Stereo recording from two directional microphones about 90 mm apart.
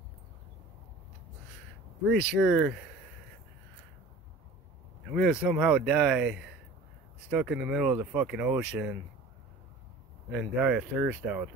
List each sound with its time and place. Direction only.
2.0 s speech: 5° right (ahead or behind)
5.1 s speech: 5° right (ahead or behind)
10.4 s speech: 10° right (ahead or behind)
11.0 s speech: 30° right (ahead or behind)